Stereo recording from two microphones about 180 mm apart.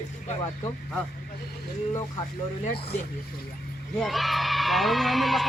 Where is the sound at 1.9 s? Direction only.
20° left (ahead or behind).